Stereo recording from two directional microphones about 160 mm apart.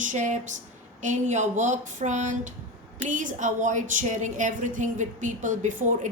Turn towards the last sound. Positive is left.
turn(degrees=-50)  # may be behind; listen again after turning